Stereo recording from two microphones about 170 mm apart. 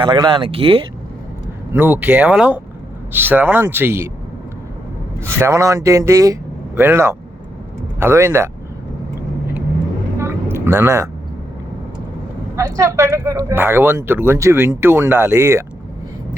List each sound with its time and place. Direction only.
0.0 s speech: 25° right (ahead or behind)
1.7 s speech: 10° right (ahead or behind)
5.2 s speech: 15° right (ahead or behind)
10.2 s a sound: 15° right (ahead or behind)
12.5 s speech: 20° right (ahead or behind)